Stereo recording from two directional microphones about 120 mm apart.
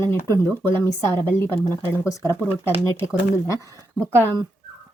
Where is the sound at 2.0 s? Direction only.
25° left (ahead or behind).